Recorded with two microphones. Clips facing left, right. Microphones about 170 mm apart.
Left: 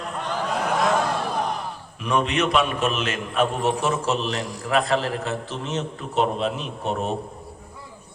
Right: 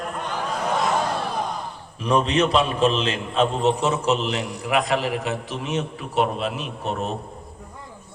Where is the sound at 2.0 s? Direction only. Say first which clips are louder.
Right 3 dB; 35° right (ahead or behind); by 6.9 s 5° right (ahead or behind).